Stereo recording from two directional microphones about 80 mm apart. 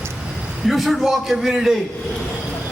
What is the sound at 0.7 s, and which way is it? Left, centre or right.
A man's voice, centre.